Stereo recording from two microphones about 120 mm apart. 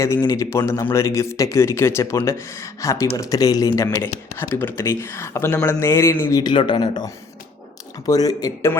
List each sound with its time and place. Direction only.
0.0 s speech: 25° left (ahead or behind)
3.8 s speech: 20° left (ahead or behind)